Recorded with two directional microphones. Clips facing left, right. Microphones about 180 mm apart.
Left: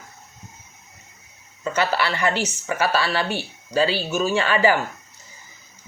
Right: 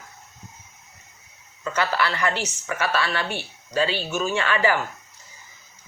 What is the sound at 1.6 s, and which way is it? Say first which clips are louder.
Speech: left 2 dB; 25° left (ahead or behind).